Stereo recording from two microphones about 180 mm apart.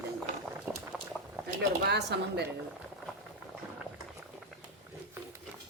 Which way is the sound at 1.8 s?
65° right (ahead or behind).